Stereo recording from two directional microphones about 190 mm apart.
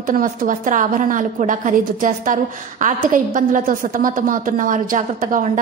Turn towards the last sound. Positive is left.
turn(degrees=-40)  # may be behind; listen again after turning